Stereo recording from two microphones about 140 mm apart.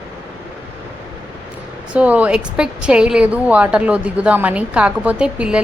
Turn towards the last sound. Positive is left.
turn(degrees=-5)  # may be behind; listen again after turning